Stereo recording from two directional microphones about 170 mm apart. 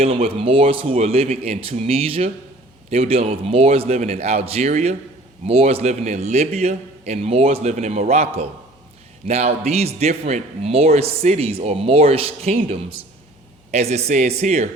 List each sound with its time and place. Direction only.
0.0 s a man's voice: 35° right (ahead or behind)